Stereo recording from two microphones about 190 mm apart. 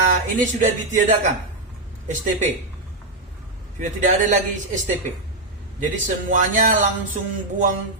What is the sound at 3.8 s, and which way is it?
Speech, 40° right (ahead or behind).